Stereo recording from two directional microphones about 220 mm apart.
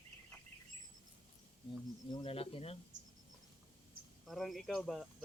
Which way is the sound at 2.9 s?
35° right (ahead or behind).